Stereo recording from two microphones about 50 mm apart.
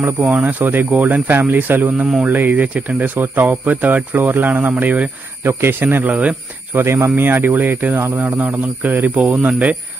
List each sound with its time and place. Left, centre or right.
0.2 s speech: right
0.6 s speech: right
5.4 s speech: right
6.0 s speech: right
6.7 s speech: right
7.2 s speech: right
8.1 s speech: right